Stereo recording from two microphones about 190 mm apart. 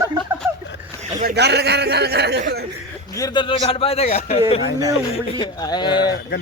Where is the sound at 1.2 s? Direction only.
60° right (ahead or behind).